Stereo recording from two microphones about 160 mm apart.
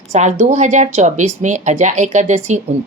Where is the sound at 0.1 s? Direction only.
45° right (ahead or behind).